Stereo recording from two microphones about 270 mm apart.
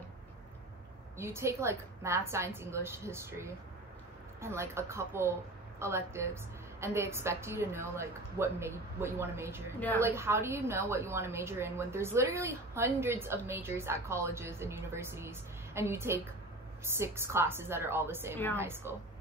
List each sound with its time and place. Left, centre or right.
1.1 s a woman's voice: centre